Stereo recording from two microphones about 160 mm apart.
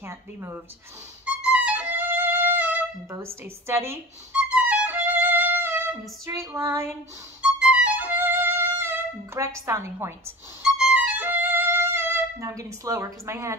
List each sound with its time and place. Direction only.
0.0 s speech: 15° right (ahead or behind)
1.2 s music: 10° right (ahead or behind)
7.4 s music: 5° right (ahead or behind)